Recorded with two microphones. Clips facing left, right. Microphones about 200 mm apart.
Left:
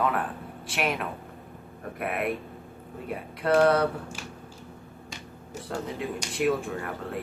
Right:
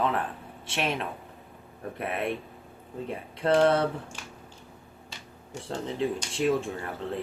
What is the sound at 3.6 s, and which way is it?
Speech, 25° right (ahead or behind).